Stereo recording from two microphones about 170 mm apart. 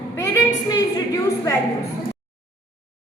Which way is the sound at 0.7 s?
20° left (ahead or behind).